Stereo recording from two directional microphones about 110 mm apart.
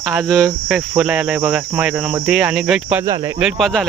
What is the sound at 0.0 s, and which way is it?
Speech, centre (ahead or behind).